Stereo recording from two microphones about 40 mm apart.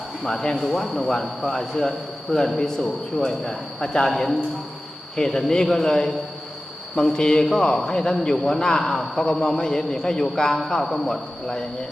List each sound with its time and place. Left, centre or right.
0.3 s a man's voice: centre
0.5 s a man's voice: centre
5.1 s a man's voice: centre